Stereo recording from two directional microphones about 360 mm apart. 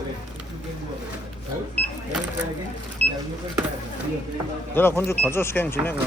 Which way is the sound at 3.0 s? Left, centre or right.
Centre.